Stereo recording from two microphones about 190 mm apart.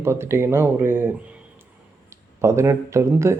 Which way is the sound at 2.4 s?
15° right (ahead or behind).